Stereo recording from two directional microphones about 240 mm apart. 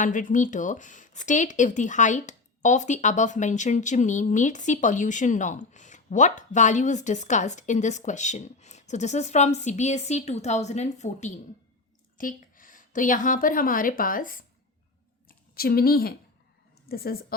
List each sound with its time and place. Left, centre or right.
0.0 s a woman's voice: left